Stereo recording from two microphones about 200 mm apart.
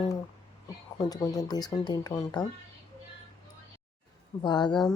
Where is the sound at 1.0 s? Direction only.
15° left (ahead or behind).